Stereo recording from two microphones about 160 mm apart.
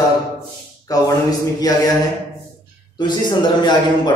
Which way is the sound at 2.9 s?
30° left (ahead or behind).